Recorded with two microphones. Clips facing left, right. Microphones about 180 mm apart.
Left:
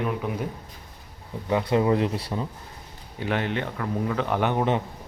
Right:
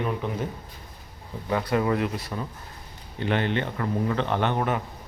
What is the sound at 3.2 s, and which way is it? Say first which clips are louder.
Speech: right 1 dB; 5° left (ahead or behind).